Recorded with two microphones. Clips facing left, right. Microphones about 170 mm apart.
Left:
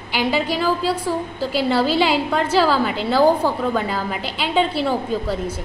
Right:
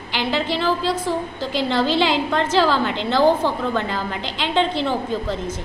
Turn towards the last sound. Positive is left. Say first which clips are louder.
# left 1 dB
turn(degrees=10)  # may be behind; listen again after turning